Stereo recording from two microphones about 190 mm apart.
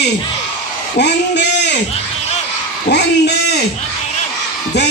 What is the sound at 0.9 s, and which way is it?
Speech, 65° left (ahead or behind).